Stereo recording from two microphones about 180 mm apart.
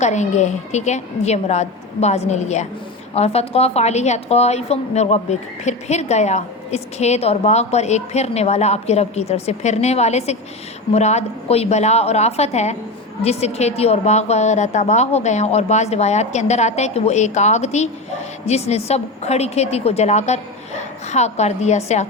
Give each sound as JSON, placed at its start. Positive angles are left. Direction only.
{"t": 0.0, "sound": "a woman's voice", "side_deg": 40}